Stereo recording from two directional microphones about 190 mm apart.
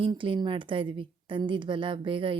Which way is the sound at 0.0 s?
25° right (ahead or behind).